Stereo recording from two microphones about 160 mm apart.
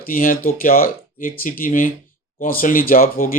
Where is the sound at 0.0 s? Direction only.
60° left (ahead or behind).